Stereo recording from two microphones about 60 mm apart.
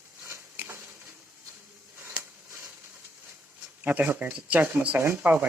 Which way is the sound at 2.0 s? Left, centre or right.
Right.